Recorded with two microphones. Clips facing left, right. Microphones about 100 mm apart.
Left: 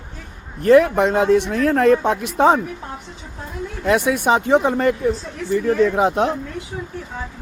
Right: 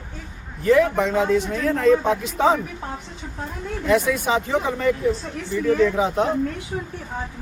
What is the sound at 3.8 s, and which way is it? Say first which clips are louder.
Speech: left 3 dB; 70° left (ahead or behind).